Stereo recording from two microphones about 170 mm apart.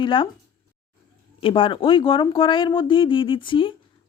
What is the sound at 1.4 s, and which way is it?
Speech, 30° left (ahead or behind).